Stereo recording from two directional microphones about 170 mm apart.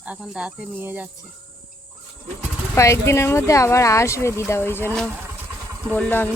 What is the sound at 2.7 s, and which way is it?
Speech, 15° left (ahead or behind).